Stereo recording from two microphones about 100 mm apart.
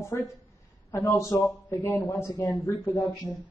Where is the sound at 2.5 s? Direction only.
20° left (ahead or behind).